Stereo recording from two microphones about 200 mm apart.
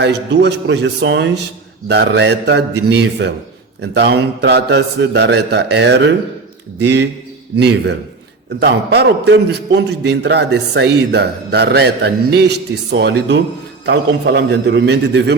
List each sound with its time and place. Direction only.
0.0 s a man's voice: 60° right (ahead or behind)
14.7 s a man's voice: 60° right (ahead or behind)